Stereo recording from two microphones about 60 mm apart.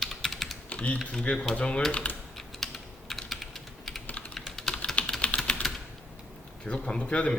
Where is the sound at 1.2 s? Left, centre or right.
Left.